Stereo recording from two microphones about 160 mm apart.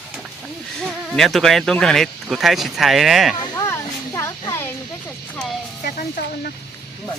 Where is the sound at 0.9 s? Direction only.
Centre (ahead or behind).